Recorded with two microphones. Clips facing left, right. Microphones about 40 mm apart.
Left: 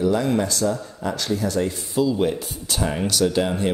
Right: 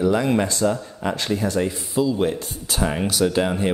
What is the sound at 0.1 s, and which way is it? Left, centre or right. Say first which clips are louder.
Speech: right 1 dB; right.